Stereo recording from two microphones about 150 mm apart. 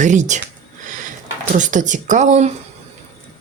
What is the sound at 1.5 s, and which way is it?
Speech, 55° right (ahead or behind).